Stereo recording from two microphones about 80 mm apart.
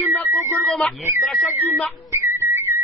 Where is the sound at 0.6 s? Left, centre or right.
Centre.